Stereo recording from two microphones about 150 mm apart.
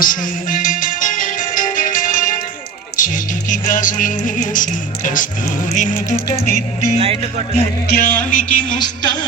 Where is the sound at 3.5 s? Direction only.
60° left (ahead or behind).